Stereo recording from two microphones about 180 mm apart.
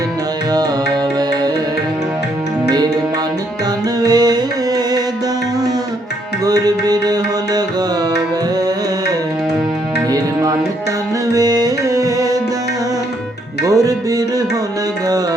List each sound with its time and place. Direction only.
2.6 s music: 20° right (ahead or behind)
4.0 s music: 20° right (ahead or behind)
6.4 s music: 20° right (ahead or behind)
10.1 s music: 20° right (ahead or behind)
13.7 s music: 20° right (ahead or behind)